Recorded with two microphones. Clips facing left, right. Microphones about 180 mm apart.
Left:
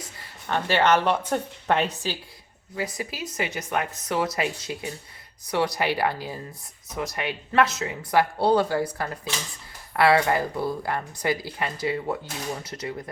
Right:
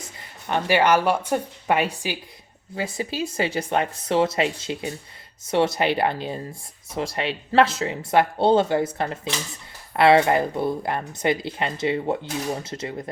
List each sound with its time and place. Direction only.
0.0 s speech: 15° right (ahead or behind)
2.7 s speech: 25° right (ahead or behind)